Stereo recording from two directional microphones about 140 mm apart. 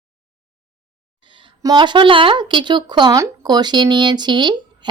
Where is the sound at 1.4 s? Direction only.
35° right (ahead or behind).